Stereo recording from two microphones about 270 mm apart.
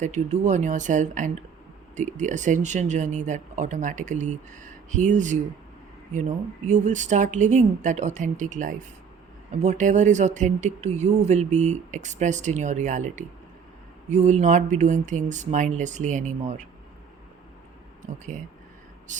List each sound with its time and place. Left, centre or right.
0.0 s speech: right
6.7 s speech: right
19.1 s a sound: right